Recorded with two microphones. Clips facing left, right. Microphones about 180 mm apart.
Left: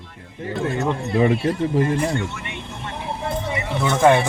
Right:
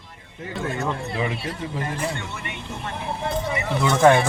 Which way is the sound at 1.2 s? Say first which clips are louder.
Left 14 dB; 45° left (ahead or behind).